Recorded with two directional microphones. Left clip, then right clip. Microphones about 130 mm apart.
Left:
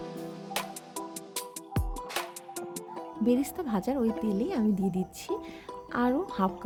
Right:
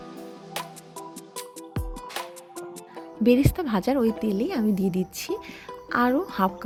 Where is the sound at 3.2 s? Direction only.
15° right (ahead or behind).